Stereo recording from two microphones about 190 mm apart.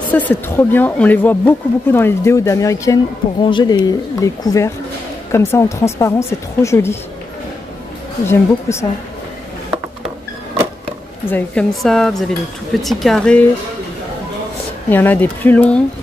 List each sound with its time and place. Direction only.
0.1 s speech: 10° left (ahead or behind)
8.3 s speech: 15° left (ahead or behind)
11.2 s speech: 10° left (ahead or behind)
14.9 s speech: 10° left (ahead or behind)